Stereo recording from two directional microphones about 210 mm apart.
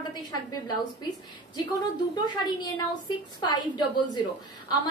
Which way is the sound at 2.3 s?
20° left (ahead or behind).